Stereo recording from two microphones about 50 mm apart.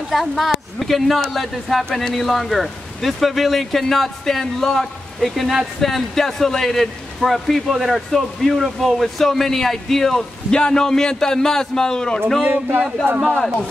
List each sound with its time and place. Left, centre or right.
0.1 s a man's voice: centre
13.3 s speech: left